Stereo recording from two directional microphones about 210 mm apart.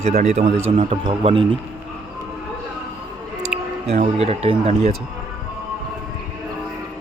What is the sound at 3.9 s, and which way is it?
A man's voice, 30° right (ahead or behind).